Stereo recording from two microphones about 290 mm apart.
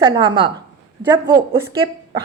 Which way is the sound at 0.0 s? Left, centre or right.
Centre.